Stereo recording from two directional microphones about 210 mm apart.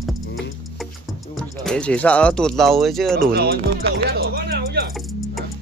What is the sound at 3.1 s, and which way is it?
Speech, 45° right (ahead or behind).